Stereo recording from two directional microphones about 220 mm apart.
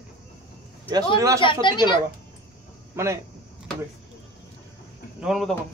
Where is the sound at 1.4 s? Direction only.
20° left (ahead or behind).